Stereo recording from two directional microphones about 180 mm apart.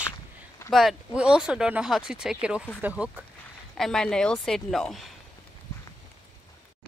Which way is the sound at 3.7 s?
5° left (ahead or behind).